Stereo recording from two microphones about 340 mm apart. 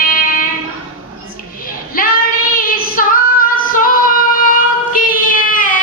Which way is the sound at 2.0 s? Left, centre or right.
Left.